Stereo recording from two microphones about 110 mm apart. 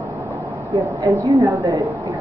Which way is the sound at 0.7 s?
30° right (ahead or behind).